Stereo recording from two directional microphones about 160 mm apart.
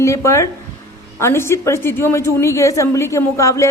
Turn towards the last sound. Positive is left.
turn(degrees=20)  # may be behind; listen again after turning